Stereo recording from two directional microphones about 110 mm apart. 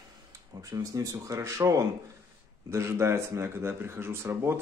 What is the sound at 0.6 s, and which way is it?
Speech, 30° right (ahead or behind).